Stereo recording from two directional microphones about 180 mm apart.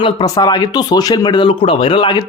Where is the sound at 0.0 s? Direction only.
25° left (ahead or behind).